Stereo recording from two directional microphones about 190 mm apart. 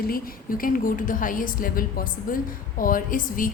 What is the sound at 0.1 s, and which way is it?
A woman's voice, 50° left (ahead or behind).